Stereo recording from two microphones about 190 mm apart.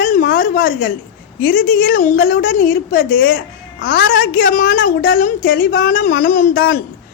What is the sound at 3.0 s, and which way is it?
A woman's voice, 70° left (ahead or behind).